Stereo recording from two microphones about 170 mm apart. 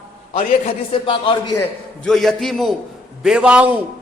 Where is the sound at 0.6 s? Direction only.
30° left (ahead or behind).